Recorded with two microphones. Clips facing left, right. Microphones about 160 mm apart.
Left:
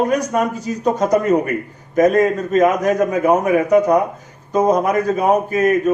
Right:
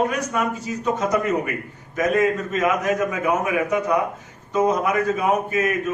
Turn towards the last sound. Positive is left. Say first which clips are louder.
# left 6 dB
turn(degrees=40)  # may be behind; listen again after turning